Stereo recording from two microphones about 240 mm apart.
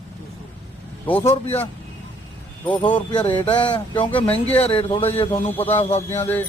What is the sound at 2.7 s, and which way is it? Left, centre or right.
A man's voice, centre.